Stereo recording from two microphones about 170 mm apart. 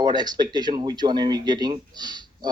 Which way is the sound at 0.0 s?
25° right (ahead or behind).